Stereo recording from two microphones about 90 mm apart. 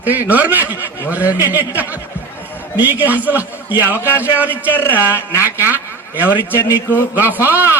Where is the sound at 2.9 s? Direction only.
20° right (ahead or behind).